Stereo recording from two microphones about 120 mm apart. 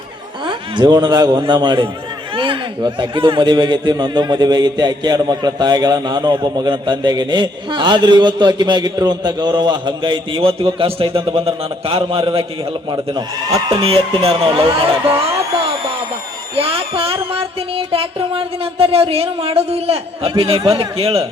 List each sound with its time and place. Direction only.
0.4 s a man's voice: 40° right (ahead or behind)
12.9 s a man's voice: 35° right (ahead or behind)
13.8 s speech: 50° right (ahead or behind)
16.6 s speech: 50° right (ahead or behind)